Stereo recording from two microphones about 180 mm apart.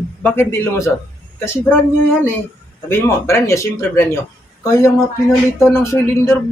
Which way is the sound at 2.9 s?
15° left (ahead or behind).